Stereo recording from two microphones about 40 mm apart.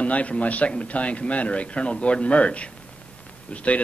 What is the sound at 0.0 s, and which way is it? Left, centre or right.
A man's voice, left.